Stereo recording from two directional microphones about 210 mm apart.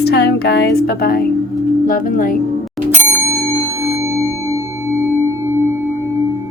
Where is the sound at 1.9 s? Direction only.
40° left (ahead or behind).